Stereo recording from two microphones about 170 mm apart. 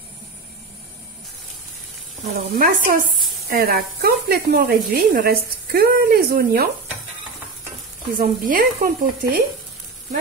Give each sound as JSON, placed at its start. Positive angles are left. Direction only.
{"t": 2.3, "sound": "speech", "side_deg": -55}
{"t": 8.2, "sound": "speech", "side_deg": -55}